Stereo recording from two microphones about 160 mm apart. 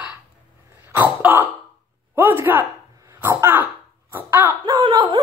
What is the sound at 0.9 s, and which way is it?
Throat clearing, 10° right (ahead or behind).